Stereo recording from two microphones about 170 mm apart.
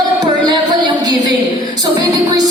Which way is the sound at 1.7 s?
25° right (ahead or behind).